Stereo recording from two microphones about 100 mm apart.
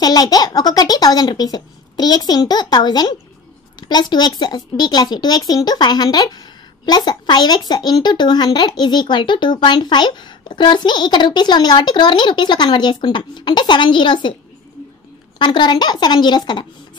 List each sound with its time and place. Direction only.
0.0 s a woman's voice: 40° left (ahead or behind)
15.3 s a woman's voice: 50° left (ahead or behind)